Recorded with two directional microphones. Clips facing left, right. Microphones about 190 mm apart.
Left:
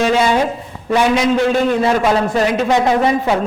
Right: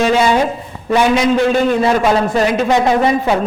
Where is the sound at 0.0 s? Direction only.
10° right (ahead or behind).